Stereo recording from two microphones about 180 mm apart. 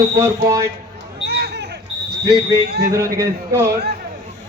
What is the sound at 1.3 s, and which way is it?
Basketball bounce, 65° right (ahead or behind).